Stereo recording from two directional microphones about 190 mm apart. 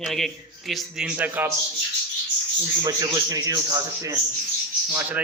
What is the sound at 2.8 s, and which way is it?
A man's voice, 20° right (ahead or behind).